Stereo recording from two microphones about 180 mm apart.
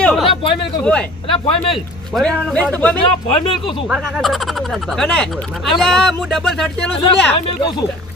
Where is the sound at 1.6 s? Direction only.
Centre (ahead or behind).